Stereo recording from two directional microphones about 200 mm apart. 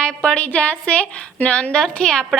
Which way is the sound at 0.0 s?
5° left (ahead or behind).